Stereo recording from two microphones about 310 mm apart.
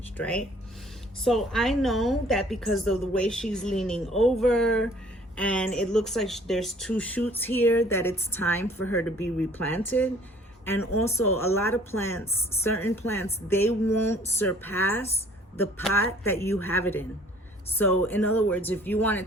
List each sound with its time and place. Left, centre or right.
0.2 s a woman's voice: centre
8.8 s speech: left
9.0 s speech: centre
11.0 s speech: centre
16.2 s a woman's voice: centre